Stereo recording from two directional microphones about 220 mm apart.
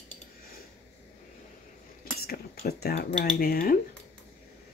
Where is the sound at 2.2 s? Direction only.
45° left (ahead or behind).